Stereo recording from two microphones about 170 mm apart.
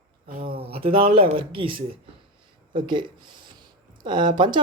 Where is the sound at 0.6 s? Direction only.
35° right (ahead or behind).